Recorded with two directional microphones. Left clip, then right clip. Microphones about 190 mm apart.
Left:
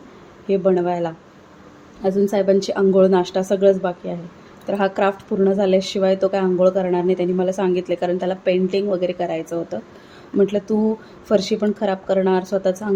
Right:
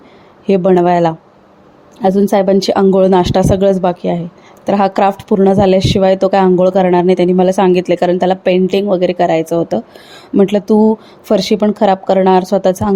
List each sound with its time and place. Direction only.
0.4 s speech: 45° right (ahead or behind)